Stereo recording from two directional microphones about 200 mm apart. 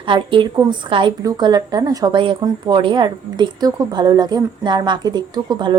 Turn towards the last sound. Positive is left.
turn(degrees=-20)  # may be behind; listen again after turning